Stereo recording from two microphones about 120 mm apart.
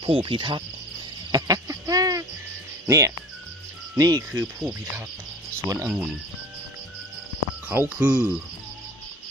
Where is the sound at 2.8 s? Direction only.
25° right (ahead or behind).